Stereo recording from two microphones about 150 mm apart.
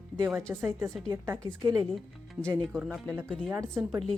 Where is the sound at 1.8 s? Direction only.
5° left (ahead or behind).